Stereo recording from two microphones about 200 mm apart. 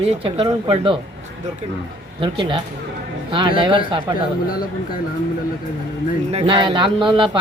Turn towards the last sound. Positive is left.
turn(degrees=-25)  # may be behind; listen again after turning